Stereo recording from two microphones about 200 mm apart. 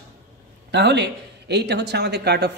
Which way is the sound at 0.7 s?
60° right (ahead or behind).